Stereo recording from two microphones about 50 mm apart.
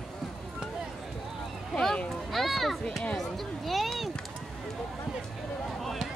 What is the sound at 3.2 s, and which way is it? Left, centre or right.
Speech, centre.